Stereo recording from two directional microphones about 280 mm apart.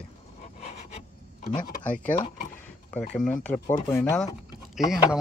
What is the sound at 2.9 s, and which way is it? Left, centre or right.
Speech, centre.